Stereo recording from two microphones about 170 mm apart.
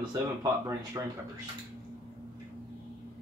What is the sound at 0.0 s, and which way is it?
Speech, 20° right (ahead or behind).